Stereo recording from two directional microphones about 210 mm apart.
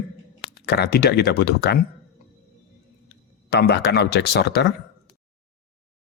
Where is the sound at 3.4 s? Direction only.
50° left (ahead or behind).